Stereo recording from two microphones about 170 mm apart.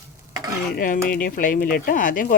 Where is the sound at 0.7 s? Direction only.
55° left (ahead or behind).